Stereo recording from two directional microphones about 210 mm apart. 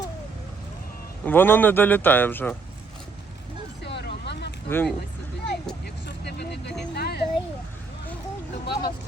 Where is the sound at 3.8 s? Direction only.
55° left (ahead or behind).